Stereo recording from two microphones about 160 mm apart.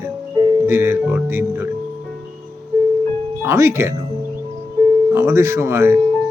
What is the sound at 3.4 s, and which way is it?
Speech, 15° right (ahead or behind).